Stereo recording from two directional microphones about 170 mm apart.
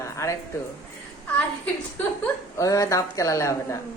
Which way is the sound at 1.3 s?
10° left (ahead or behind).